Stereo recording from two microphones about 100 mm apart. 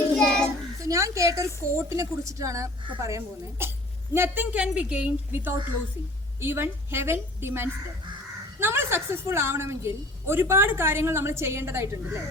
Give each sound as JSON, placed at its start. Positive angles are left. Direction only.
{"t": 0.2, "sound": "child singing", "side_deg": 5}
{"t": 0.8, "sound": "a woman's voice", "side_deg": -35}
{"t": 4.5, "sound": "a woman's voice", "side_deg": -15}